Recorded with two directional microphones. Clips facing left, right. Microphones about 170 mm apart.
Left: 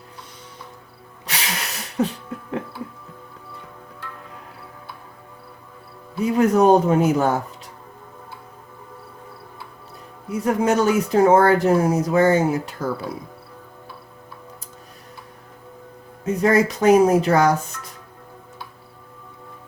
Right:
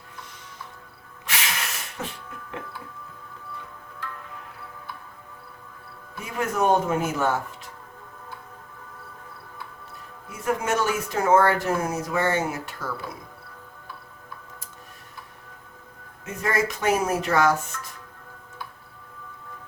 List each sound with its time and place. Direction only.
1.3 s a sound: 35° left (ahead or behind)
6.1 s speech: 35° left (ahead or behind)
10.4 s speech: 35° left (ahead or behind)
16.2 s speech: 35° left (ahead or behind)